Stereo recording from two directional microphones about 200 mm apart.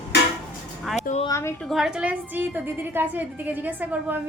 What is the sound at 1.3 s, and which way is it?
Speech, 15° left (ahead or behind).